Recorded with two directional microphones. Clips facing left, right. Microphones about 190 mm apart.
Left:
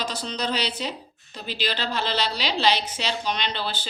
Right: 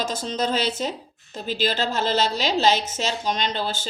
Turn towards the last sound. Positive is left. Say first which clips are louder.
# right 3 dB
turn(degrees=-45)  # may be behind; listen again after turning